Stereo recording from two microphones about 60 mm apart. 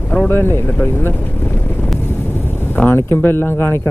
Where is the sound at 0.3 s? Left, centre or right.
Left.